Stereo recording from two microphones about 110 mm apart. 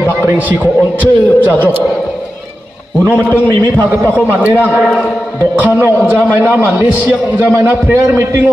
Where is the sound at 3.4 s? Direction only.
15° left (ahead or behind).